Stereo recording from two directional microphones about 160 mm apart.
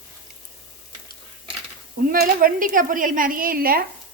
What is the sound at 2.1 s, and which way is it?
A woman's voice, 65° right (ahead or behind).